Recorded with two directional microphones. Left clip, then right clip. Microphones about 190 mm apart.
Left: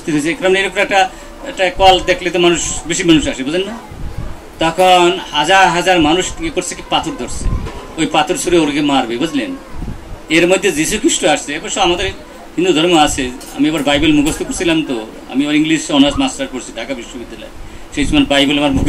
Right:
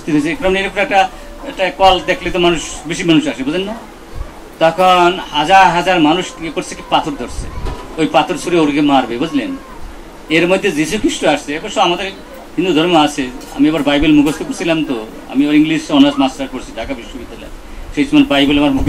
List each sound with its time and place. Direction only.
0.0 s speech: 55° left (ahead or behind)
2.0 s speech: 55° left (ahead or behind)
17.9 s speech: 55° left (ahead or behind)